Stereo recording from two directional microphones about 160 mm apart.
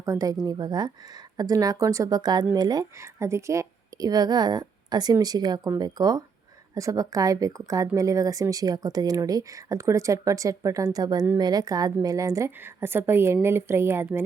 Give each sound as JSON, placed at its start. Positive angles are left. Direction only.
{"t": 0.0, "sound": "a woman's voice", "side_deg": -20}